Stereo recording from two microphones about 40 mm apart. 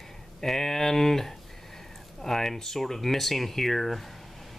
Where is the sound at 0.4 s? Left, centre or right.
Centre.